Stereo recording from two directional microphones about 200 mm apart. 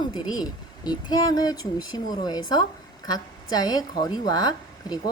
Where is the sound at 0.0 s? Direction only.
20° left (ahead or behind).